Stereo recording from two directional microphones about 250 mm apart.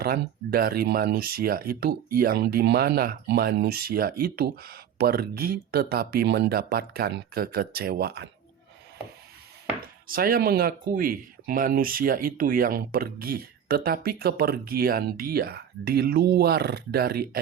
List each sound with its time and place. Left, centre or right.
0.0 s speech: right
10.1 s speech: right